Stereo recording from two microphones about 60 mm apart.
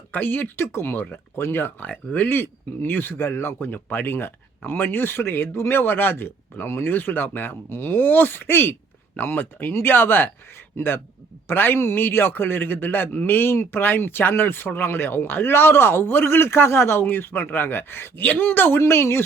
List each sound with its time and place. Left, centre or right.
0.1 s a man's voice: left
1.8 s a man's voice: left
18.8 s speech: left